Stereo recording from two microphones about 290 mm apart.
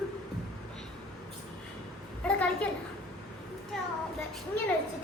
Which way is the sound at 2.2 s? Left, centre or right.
Centre.